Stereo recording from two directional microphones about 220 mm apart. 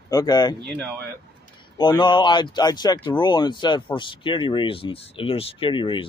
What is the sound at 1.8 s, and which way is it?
Speech, 20° left (ahead or behind).